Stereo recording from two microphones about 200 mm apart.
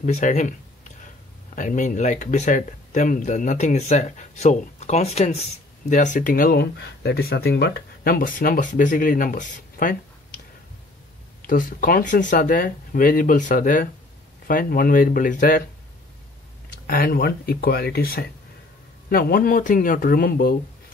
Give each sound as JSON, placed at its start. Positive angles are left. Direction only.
{"t": 0.0, "sound": "speech", "side_deg": 35}
{"t": 11.4, "sound": "speech", "side_deg": 45}
{"t": 16.8, "sound": "speech", "side_deg": 50}